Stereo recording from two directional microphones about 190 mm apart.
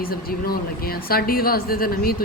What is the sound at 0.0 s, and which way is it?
Speech, 50° left (ahead or behind).